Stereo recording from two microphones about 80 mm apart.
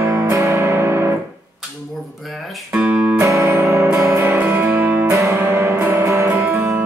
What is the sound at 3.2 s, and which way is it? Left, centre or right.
Music, right.